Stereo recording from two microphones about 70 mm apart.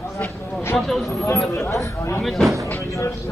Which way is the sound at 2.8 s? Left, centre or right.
Left.